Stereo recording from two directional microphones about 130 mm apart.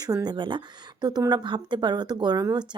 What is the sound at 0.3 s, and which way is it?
Speech, 35° right (ahead or behind).